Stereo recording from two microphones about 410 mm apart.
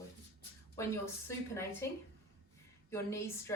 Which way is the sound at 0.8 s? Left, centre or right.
Centre.